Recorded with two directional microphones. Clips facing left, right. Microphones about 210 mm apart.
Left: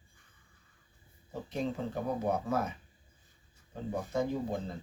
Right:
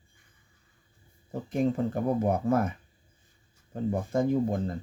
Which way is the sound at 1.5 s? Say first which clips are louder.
Right 8 dB; 50° right (ahead or behind).